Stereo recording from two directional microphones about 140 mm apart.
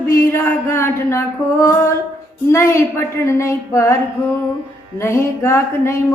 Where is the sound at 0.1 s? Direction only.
20° left (ahead or behind).